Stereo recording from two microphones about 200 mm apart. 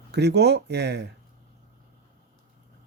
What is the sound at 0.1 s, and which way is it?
Speech, 55° right (ahead or behind).